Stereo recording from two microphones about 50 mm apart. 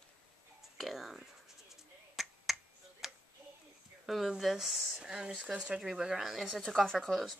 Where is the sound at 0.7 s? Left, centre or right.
Centre.